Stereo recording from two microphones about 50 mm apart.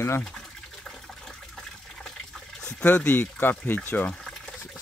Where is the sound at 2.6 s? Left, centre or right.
Left.